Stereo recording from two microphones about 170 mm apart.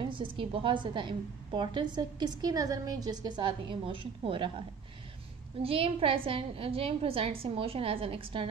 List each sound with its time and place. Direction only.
0.1 s a woman's voice: 30° right (ahead or behind)